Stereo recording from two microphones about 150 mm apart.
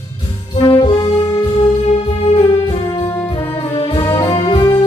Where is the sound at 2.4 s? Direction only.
35° left (ahead or behind).